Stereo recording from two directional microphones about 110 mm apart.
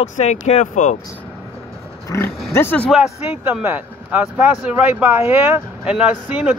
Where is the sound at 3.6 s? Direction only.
15° right (ahead or behind).